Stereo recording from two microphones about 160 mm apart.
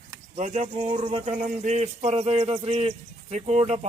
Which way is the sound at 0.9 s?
35° right (ahead or behind).